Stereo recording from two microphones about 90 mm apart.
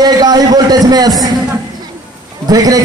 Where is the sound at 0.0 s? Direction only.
45° right (ahead or behind).